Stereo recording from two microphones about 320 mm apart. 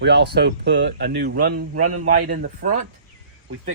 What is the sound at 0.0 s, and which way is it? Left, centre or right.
Speech, right.